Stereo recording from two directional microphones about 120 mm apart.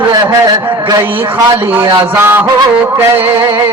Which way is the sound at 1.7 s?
20° right (ahead or behind).